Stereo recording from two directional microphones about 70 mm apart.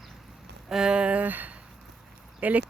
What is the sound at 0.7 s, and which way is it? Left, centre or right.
Speech, centre.